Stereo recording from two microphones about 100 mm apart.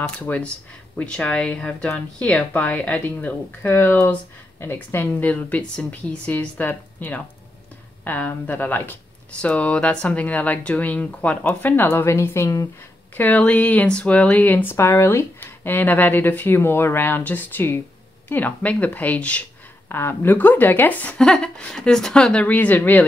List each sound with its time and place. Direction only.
0.2 s speech: 15° left (ahead or behind); by 12.6 s 30° left (ahead or behind)
13.1 s speech: 15° left (ahead or behind)
19.9 s speech: 25° left (ahead or behind)